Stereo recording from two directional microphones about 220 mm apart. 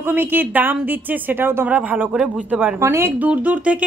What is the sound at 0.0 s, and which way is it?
A woman's voice, 10° right (ahead or behind).